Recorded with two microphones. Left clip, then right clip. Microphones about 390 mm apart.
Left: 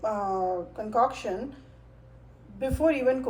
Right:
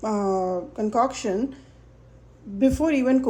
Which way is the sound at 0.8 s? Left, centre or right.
Right.